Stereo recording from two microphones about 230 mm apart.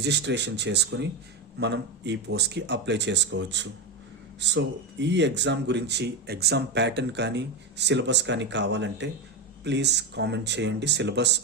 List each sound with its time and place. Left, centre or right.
0.0 s speech: right